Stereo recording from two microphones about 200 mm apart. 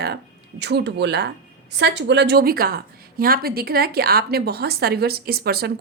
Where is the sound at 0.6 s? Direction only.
60° right (ahead or behind).